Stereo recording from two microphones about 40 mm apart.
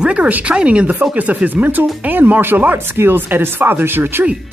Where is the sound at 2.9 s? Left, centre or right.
Right.